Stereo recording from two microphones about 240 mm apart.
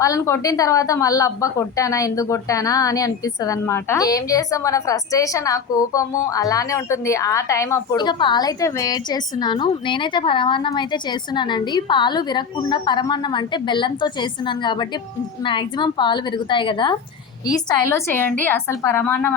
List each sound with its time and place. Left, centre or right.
0.0 s a woman's voice: centre